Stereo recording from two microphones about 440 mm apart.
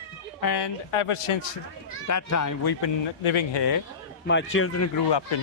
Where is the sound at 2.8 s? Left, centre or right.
Left.